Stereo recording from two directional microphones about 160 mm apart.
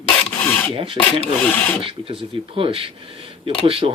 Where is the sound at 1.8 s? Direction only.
35° right (ahead or behind).